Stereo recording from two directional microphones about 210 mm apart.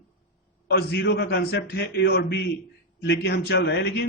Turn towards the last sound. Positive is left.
turn(degrees=50)  # may be behind; listen again after turning